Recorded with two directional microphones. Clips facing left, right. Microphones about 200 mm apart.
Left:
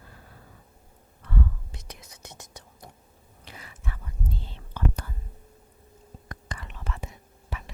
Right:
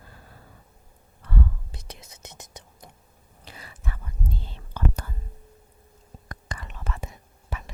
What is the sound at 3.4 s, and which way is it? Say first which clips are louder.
Whispering: right 1 dB; 35° right (ahead or behind).